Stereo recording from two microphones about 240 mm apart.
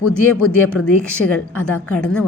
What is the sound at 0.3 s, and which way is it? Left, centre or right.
A woman's voice, left.